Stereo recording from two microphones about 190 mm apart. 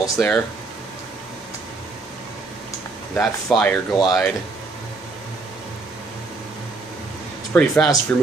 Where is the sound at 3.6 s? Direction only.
5° left (ahead or behind).